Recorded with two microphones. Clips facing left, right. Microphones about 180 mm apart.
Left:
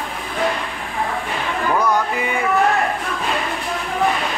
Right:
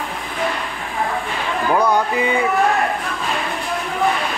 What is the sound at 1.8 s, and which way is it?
Music, 15° right (ahead or behind).